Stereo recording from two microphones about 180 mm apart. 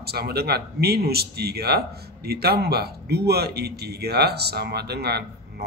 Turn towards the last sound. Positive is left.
turn(degrees=-65)  # may be behind; listen again after turning